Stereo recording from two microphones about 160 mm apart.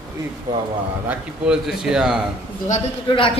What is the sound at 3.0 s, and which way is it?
Speech, 35° left (ahead or behind).